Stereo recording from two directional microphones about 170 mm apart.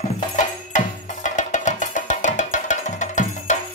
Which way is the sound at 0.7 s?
45° left (ahead or behind).